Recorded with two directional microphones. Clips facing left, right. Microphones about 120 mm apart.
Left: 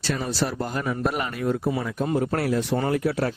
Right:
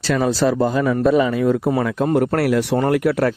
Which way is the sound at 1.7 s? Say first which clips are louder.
Right 7 dB; 80° right.